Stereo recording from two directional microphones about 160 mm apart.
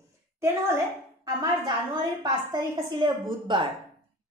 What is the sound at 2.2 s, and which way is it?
A woman's voice, 25° right (ahead or behind).